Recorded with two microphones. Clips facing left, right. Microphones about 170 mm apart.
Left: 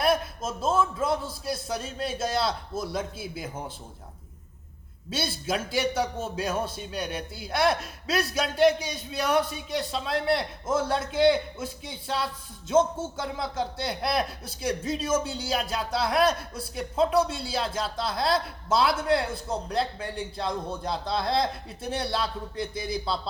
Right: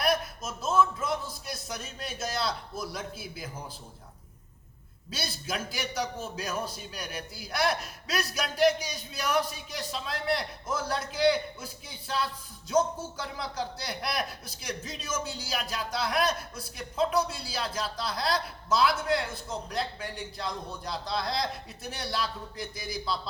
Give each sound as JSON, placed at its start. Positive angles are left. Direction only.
{"t": 0.0, "sound": "a man's voice", "side_deg": 25}
{"t": 5.1, "sound": "a man's voice", "side_deg": 25}